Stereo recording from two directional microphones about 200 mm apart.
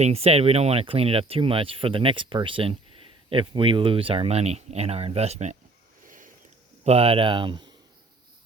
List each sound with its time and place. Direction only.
0.0 s speech: 30° right (ahead or behind)
6.1 s a sound: 40° right (ahead or behind)
6.8 s speech: 30° right (ahead or behind)